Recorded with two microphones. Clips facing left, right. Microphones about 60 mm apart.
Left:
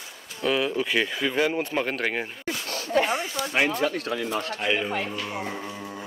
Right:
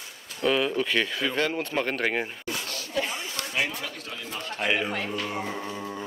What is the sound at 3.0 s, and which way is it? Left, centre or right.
Speech, left.